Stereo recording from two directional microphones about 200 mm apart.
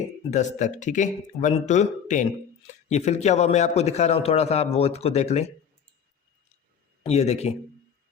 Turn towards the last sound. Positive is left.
turn(degrees=30)  # may be behind; listen again after turning